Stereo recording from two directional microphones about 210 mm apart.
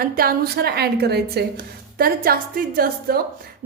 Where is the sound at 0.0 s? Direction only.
45° right (ahead or behind).